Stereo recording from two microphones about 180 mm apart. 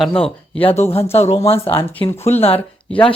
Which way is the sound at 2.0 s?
35° left (ahead or behind).